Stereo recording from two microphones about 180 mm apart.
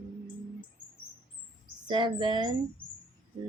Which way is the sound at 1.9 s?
25° right (ahead or behind).